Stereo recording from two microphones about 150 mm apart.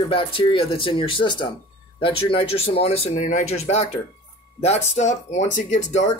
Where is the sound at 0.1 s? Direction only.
35° left (ahead or behind).